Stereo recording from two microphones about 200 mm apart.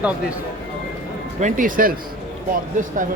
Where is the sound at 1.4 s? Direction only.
40° right (ahead or behind).